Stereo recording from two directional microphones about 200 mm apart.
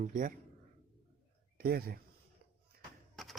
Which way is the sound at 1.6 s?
50° right (ahead or behind).